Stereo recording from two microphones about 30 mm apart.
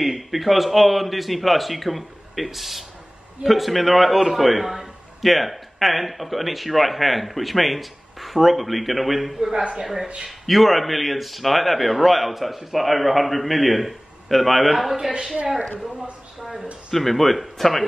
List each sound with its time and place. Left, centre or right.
0.0 s a man's voice: centre
9.5 s speech: right
10.4 s a man's voice: centre
15.0 s speech: right
16.3 s a sound: right
16.9 s a man's voice: centre